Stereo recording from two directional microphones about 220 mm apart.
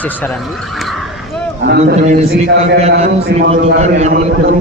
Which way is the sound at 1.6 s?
45° right (ahead or behind).